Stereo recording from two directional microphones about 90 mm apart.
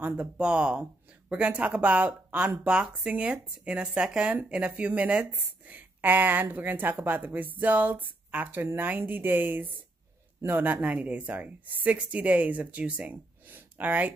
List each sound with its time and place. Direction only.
0.0 s a woman's voice: 20° right (ahead or behind)